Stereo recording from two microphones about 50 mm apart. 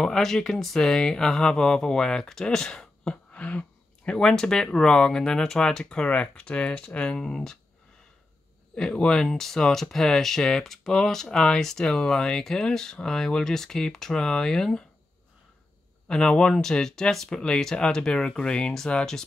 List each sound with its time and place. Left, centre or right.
0.0 s speech: centre
8.7 s speech: centre
16.1 s speech: centre